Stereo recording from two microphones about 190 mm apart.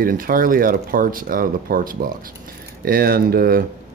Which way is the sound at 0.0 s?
50° right (ahead or behind).